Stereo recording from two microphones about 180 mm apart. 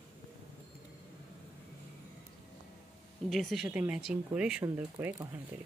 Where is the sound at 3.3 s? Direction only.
Centre (ahead or behind).